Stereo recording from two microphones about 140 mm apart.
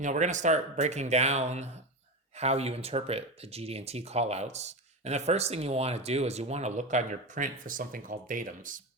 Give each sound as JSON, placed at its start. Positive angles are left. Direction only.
{"t": 0.0, "sound": "speech", "side_deg": -60}